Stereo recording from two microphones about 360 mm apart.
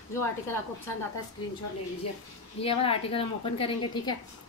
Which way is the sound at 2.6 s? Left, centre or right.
Centre.